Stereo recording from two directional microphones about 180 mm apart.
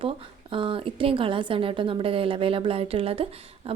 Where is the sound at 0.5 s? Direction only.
30° right (ahead or behind).